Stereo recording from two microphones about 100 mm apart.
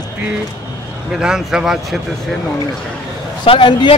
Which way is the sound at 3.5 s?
60° left (ahead or behind).